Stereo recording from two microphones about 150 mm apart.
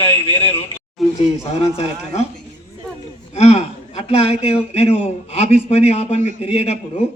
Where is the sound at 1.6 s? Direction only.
45° left (ahead or behind).